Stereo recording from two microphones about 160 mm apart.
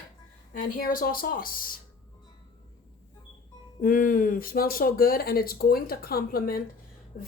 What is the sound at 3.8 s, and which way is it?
Speech, 60° left (ahead or behind).